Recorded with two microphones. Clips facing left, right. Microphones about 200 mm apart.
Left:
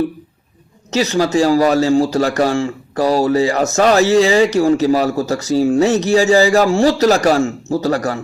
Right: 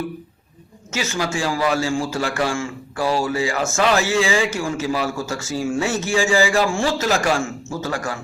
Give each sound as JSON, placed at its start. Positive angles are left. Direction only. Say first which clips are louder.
{"t": 0.9, "sound": "a man's voice", "louder": "left 9 dB", "side_deg": 35}